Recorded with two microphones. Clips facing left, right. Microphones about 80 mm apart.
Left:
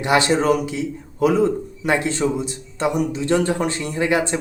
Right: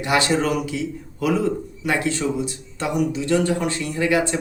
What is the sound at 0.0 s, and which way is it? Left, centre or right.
Speech, left.